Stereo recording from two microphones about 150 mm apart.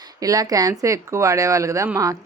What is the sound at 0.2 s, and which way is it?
Speech, 25° right (ahead or behind).